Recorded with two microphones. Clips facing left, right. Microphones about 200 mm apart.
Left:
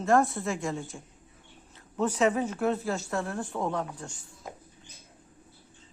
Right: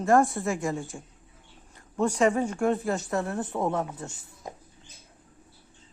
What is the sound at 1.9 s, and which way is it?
Speech, 10° right (ahead or behind).